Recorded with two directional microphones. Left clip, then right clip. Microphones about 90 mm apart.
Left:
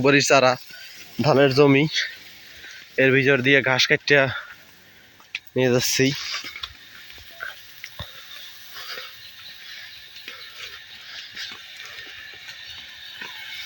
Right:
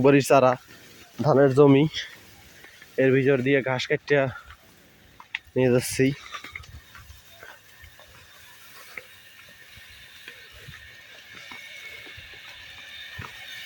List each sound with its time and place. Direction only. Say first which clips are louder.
0.0 s speech: left 1 dB; 75° right (ahead or behind)
1.2 s speech: left 2 dB; 30° right (ahead or behind)
1.5 s speech: left 1 dB; 50° right (ahead or behind)
2.9 s speech: left 3 dB; 25° right (ahead or behind)
5.5 s speech: left 1 dB; 25° right (ahead or behind)
5.8 s speech: left 4 dB; 40° right (ahead or behind)